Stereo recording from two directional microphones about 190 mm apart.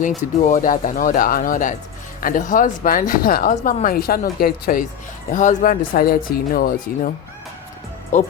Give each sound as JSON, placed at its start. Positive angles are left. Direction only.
{"t": 0.4, "sound": "speech", "side_deg": 45}
{"t": 8.1, "sound": "speech", "side_deg": 40}